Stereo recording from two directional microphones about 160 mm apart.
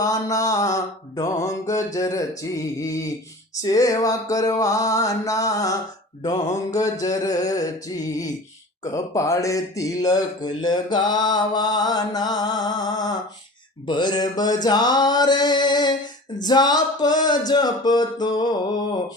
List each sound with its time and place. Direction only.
0.0 s mantra: 20° left (ahead or behind)